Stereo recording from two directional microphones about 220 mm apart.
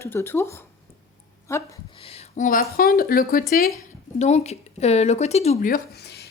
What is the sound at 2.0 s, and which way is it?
Speech, 30° left (ahead or behind).